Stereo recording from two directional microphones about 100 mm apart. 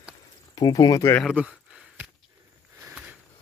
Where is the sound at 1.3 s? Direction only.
10° right (ahead or behind).